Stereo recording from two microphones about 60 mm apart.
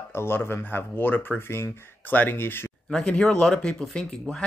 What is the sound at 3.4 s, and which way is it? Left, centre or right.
Speech, centre.